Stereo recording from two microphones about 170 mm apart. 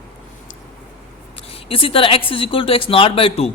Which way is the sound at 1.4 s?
35° left (ahead or behind).